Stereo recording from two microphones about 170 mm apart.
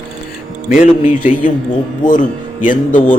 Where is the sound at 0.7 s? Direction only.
55° left (ahead or behind).